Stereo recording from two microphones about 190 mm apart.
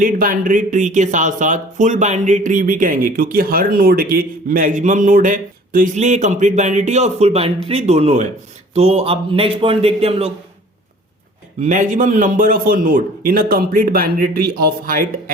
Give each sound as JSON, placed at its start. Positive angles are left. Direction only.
{"t": 0.0, "sound": "speech", "side_deg": -45}
{"t": 11.6, "sound": "a man's voice", "side_deg": -40}